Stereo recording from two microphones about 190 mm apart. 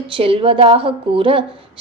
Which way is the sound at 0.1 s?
30° right (ahead or behind).